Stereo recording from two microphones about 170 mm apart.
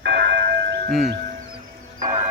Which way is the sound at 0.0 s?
90° right.